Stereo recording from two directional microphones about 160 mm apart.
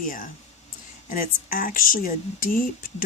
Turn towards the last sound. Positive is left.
turn(degrees=60)  # may be behind; listen again after turning